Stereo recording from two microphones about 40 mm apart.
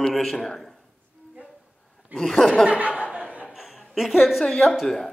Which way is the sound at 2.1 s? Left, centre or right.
Centre.